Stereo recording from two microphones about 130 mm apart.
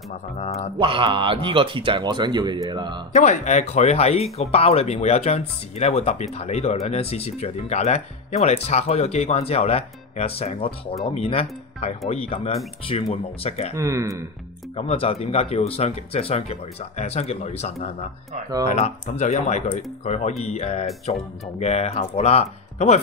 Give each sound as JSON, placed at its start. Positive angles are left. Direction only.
{"t": 0.7, "sound": "speech", "side_deg": -40}
{"t": 3.1, "sound": "speech", "side_deg": 65}
{"t": 13.7, "sound": "speech", "side_deg": -25}
{"t": 14.8, "sound": "speech", "side_deg": 50}